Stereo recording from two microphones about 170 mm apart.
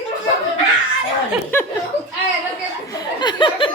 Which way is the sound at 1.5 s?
10° left (ahead or behind).